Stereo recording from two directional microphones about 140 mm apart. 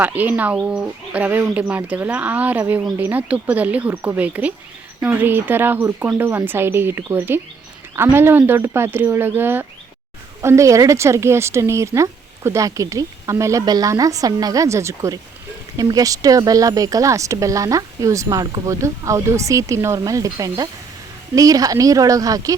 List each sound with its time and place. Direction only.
0.0 s speech: 10° right (ahead or behind)